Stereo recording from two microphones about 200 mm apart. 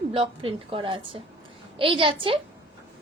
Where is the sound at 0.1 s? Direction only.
30° right (ahead or behind).